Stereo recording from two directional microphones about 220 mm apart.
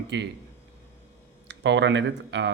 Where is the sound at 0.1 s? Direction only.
55° right (ahead or behind).